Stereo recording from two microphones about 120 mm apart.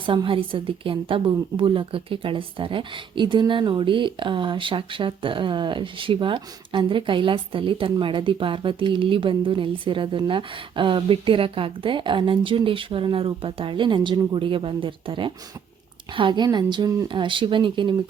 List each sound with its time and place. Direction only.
0.0 s a woman's voice: 45° right (ahead or behind)
17.1 s a woman's voice: 45° right (ahead or behind)